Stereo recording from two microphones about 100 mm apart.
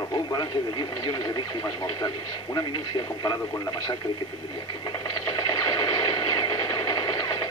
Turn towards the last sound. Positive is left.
turn(degrees=45)  # may be behind; listen again after turning